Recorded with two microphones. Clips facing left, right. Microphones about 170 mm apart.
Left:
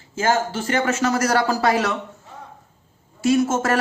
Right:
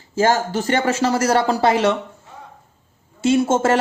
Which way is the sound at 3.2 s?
25° right (ahead or behind).